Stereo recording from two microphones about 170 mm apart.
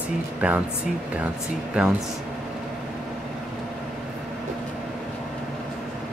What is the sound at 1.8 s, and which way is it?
Speech, 5° right (ahead or behind).